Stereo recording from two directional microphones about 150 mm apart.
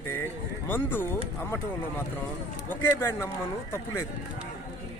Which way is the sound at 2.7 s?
15° left (ahead or behind).